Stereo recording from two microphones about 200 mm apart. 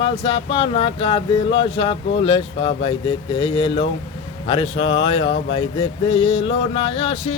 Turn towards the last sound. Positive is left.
turn(degrees=30)  # may be behind; listen again after turning